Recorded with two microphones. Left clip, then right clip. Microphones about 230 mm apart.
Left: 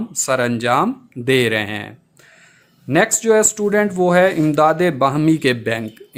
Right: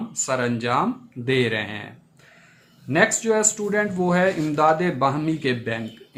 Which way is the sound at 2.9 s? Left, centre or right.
Left.